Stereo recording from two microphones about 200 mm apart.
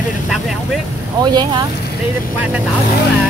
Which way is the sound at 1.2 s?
20° right (ahead or behind).